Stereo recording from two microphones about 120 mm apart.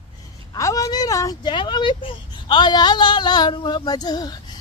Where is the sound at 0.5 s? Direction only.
25° left (ahead or behind).